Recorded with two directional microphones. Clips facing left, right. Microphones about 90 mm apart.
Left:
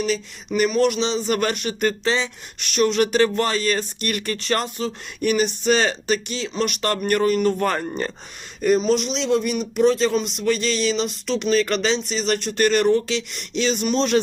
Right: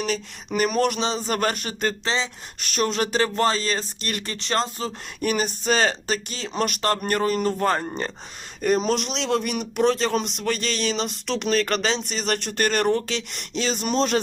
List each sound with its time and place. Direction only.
0.0 s speech: 40° right (ahead or behind); by 4.7 s 25° right (ahead or behind)
4.8 s speech: 35° right (ahead or behind)
8.8 s speech: 55° right (ahead or behind)